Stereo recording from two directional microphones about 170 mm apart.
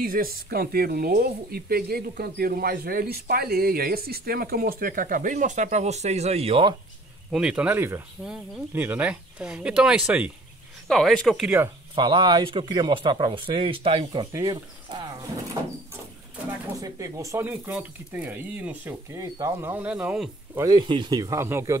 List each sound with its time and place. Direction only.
0.0 s speech: 60° right (ahead or behind); by 6.7 s 35° right (ahead or behind)
7.2 s speech: 5° right (ahead or behind)
11.9 s speech: 30° right (ahead or behind)
15.6 s sliding door: 20° right (ahead or behind)
16.8 s speech: 20° right (ahead or behind)
20.6 s speech: 25° right (ahead or behind)